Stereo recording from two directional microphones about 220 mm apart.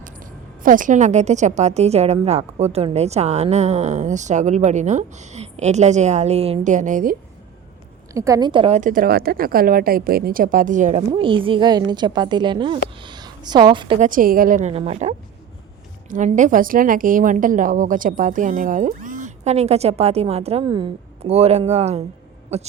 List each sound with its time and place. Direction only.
0.0 s a woman's voice: 40° right (ahead or behind)
8.1 s a woman's voice: 15° right (ahead or behind); by 11.0 s 35° right (ahead or behind)
11.1 s a woman's voice: 25° right (ahead or behind)
14.0 s a woman's voice: 40° right (ahead or behind)